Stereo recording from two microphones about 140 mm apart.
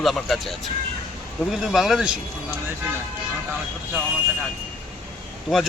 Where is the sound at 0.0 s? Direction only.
Centre (ahead or behind).